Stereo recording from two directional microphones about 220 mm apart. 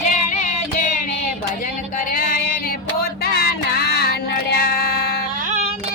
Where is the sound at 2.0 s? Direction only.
40° left (ahead or behind).